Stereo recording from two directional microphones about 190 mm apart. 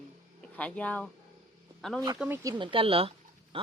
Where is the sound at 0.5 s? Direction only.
5° left (ahead or behind).